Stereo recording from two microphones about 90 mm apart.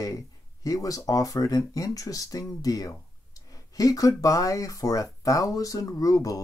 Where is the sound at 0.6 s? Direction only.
40° left (ahead or behind).